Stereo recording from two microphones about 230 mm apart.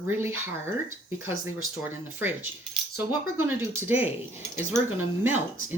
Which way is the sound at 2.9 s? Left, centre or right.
Centre.